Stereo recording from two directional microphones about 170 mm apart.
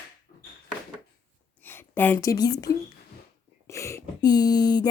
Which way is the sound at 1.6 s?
15° left (ahead or behind).